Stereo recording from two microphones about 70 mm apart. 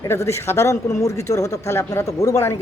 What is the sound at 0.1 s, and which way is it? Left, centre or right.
Speech, left.